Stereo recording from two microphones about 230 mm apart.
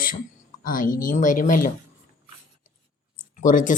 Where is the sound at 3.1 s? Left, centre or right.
Left.